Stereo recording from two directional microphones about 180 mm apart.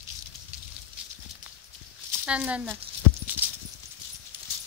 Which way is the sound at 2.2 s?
5° right (ahead or behind).